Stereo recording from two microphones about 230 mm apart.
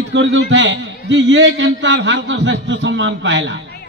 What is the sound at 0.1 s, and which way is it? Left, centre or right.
A man's voice, right.